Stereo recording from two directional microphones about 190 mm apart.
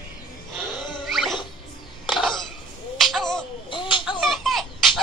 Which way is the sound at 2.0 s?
Centre (ahead or behind).